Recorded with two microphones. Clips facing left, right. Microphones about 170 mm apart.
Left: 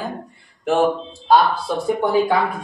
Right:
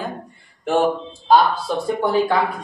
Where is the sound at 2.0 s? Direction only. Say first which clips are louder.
Left 1 dB; 15° left (ahead or behind).